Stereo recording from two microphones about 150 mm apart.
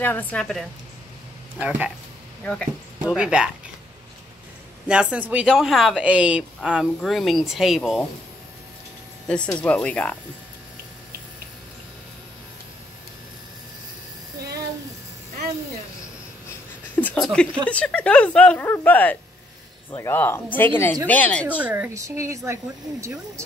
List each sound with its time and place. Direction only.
0.0 s speech: 10° left (ahead or behind)
1.6 s speech: 10° right (ahead or behind)
2.4 s speech: 5° left (ahead or behind)
3.1 s speech: 5° right (ahead or behind)
4.8 s speech: 5° right (ahead or behind)
9.5 s speech: 10° left (ahead or behind)
16.9 s a sound: 10° left (ahead or behind)
17.2 s speech: 5° left (ahead or behind)
21.5 s speech: 10° right (ahead or behind)